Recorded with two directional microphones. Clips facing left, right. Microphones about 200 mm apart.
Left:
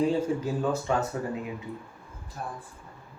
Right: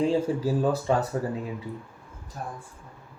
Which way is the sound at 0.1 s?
35° right (ahead or behind).